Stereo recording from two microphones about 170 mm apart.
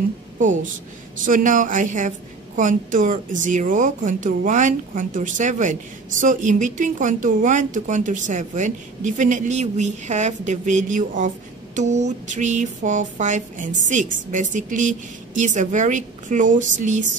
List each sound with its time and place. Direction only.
0.4 s speech: 50° right (ahead or behind)